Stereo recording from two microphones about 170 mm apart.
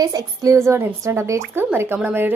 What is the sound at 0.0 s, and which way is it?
A woman's voice, 20° right (ahead or behind).